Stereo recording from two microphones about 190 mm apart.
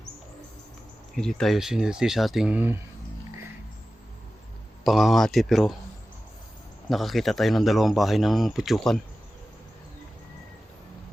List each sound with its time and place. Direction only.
1.1 s speech: 5° left (ahead or behind)
4.8 s speech: centre (ahead or behind)
6.9 s speech: centre (ahead or behind)